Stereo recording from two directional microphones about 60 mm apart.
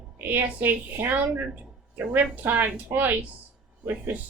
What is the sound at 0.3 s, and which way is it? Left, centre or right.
Speech, right.